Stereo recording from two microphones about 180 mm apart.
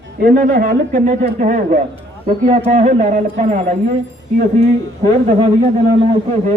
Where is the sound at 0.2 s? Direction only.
55° right (ahead or behind).